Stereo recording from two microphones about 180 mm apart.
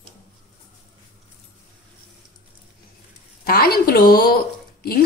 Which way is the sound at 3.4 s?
55° left (ahead or behind).